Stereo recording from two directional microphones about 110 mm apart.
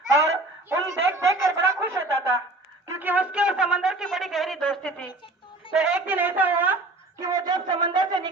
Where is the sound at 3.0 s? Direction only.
15° right (ahead or behind); by 5.1 s 5° left (ahead or behind).